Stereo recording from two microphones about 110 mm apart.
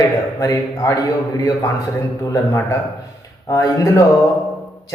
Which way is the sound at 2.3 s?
30° left (ahead or behind).